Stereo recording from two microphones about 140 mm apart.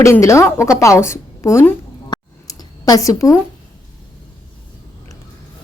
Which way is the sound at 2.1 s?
25° left (ahead or behind).